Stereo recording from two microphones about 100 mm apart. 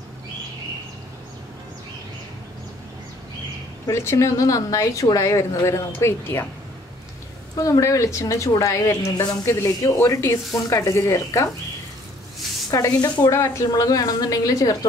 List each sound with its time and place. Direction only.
3.8 s a woman's voice: 25° left (ahead or behind)
7.5 s a woman's voice: 35° left (ahead or behind)
12.7 s a woman's voice: 40° left (ahead or behind)
13.3 s a woman's voice: 30° left (ahead or behind)